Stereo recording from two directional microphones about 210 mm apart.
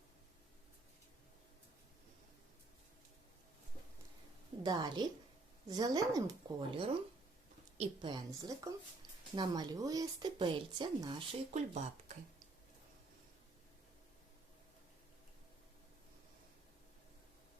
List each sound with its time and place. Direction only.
4.6 s a woman's voice: 20° right (ahead or behind)
11.5 s speech: 35° right (ahead or behind)